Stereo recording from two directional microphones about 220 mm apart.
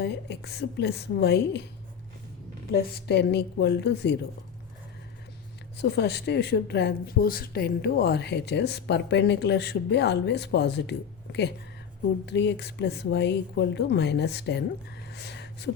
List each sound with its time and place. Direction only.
0.0 s speech: 50° left (ahead or behind)
3.1 s speech: 50° left (ahead or behind)
5.7 s speech: 50° left (ahead or behind)
15.1 s a sound: 50° left (ahead or behind)